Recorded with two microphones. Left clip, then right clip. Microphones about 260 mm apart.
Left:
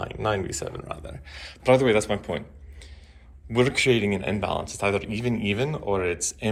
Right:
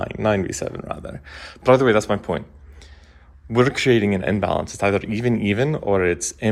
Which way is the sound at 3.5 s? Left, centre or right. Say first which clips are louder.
Right 4 dB; right.